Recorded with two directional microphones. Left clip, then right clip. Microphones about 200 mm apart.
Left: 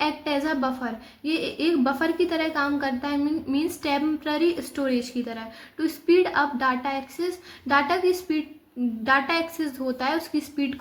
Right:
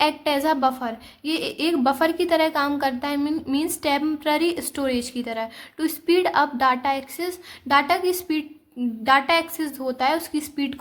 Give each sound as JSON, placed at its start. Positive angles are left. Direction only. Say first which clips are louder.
{"t": 0.0, "sound": "a woman's voice", "louder": "right 5 dB", "side_deg": -40}